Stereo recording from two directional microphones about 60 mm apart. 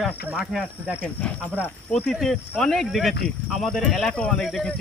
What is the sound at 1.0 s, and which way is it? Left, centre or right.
Speech, centre.